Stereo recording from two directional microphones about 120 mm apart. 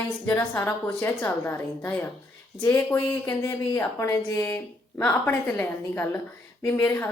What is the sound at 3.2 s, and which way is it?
A woman's voice, 30° left (ahead or behind).